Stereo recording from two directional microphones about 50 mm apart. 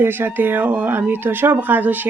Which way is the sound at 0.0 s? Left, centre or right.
Right.